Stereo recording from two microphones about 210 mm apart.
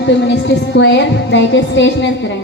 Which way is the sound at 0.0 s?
55° left (ahead or behind).